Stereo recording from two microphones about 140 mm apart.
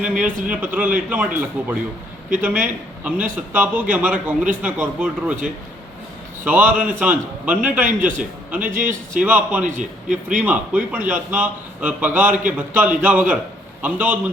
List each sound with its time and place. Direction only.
0.0 s a man's voice: 10° right (ahead or behind)
6.4 s a man's voice: 10° right (ahead or behind)
8.8 s speech: 70° right (ahead or behind)
9.2 s a man's voice: 10° right (ahead or behind)